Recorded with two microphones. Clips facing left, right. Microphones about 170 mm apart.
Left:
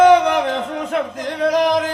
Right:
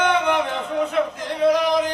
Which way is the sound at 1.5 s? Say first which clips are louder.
Left 2 dB; 90° left.